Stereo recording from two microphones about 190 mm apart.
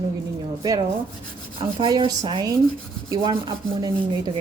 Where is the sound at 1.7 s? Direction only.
25° right (ahead or behind).